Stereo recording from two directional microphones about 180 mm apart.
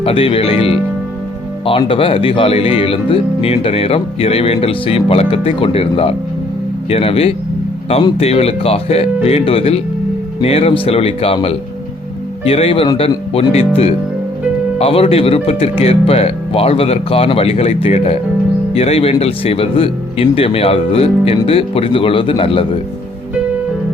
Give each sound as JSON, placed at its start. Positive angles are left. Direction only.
{"t": 0.0, "sound": "speech", "side_deg": 30}
{"t": 14.8, "sound": "speech", "side_deg": 35}